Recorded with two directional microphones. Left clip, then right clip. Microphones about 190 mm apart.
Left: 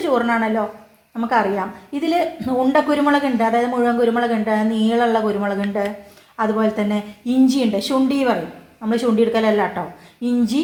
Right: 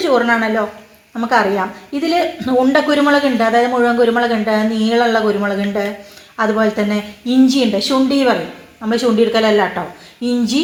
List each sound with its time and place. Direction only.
0.0 s a woman's voice: 15° right (ahead or behind)